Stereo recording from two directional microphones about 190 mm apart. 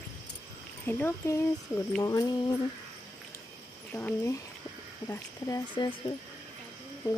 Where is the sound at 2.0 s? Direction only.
20° left (ahead or behind).